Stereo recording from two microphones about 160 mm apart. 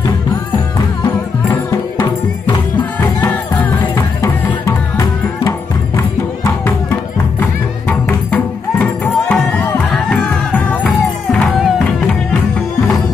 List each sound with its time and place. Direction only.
1.0 s music: 15° left (ahead or behind)
3.9 s music: 15° left (ahead or behind); by 12.2 s centre (ahead or behind)